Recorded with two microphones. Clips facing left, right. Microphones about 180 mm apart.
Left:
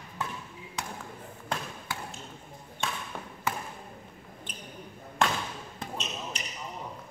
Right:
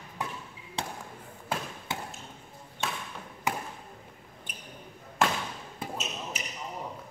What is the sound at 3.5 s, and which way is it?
Basketball bounce, 15° right (ahead or behind).